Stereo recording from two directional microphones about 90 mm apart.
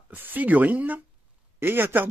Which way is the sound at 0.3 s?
20° right (ahead or behind).